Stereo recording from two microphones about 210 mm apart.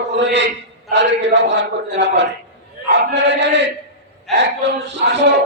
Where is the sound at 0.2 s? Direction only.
55° right (ahead or behind).